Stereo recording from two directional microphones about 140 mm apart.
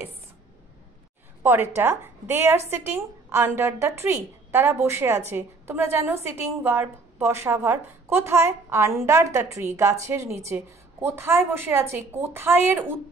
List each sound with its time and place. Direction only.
1.4 s a woman's voice: 15° right (ahead or behind)